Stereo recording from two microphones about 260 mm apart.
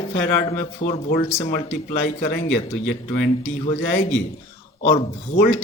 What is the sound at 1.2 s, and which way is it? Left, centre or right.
Speech, centre.